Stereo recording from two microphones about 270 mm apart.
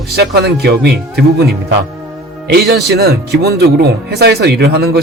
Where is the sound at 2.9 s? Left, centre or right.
Right.